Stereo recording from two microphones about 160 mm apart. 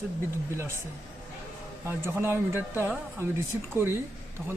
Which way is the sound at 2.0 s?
15° right (ahead or behind).